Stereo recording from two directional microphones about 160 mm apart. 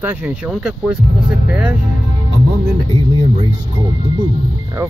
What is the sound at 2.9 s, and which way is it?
Speech, 35° right (ahead or behind).